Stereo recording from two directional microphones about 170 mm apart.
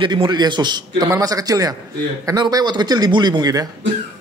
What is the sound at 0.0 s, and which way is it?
A man's voice, 25° right (ahead or behind).